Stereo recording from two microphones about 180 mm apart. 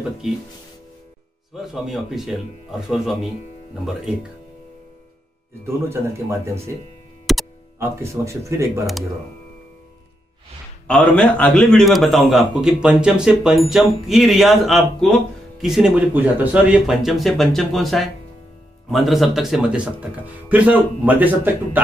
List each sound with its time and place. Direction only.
1.6 s a man's voice: centre (ahead or behind)
5.9 s a man's voice: 15° right (ahead or behind)
7.3 s music: centre (ahead or behind)
7.8 s a man's voice: 15° right (ahead or behind)
10.9 s a man's voice: 10° left (ahead or behind); by 21.3 s 10° right (ahead or behind)